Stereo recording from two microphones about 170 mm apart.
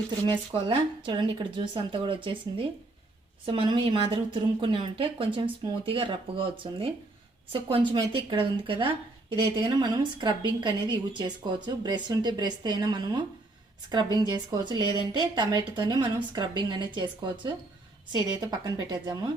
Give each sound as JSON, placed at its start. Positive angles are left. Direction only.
{"t": 0.3, "sound": "speech", "side_deg": -30}